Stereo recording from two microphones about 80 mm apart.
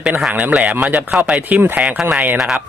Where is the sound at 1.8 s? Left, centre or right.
Centre.